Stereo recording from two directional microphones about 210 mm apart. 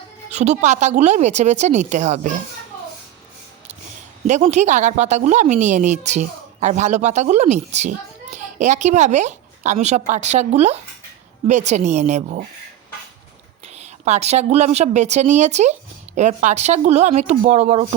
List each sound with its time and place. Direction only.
0.3 s a woman's voice: 30° right (ahead or behind)
4.3 s a woman's voice: 30° right (ahead or behind)
14.0 s a woman's voice: 30° right (ahead or behind)